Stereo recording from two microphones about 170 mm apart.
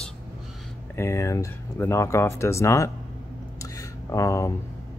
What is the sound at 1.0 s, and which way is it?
Speech, 15° left (ahead or behind).